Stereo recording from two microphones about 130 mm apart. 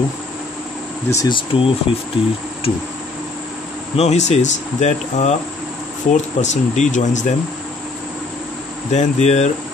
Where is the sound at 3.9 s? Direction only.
55° left (ahead or behind).